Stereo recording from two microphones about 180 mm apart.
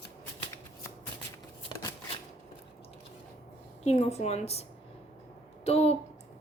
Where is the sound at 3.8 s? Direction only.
35° left (ahead or behind).